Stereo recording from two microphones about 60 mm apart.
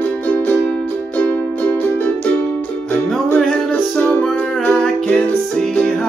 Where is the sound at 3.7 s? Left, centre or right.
Left.